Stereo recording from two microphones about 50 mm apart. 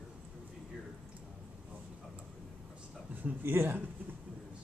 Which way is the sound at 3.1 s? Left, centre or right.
Right.